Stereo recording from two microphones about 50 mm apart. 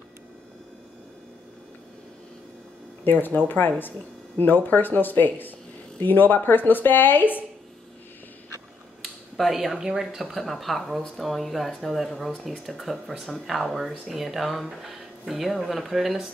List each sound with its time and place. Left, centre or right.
3.0 s speech: left
9.0 s a sound: centre
9.8 s speech: centre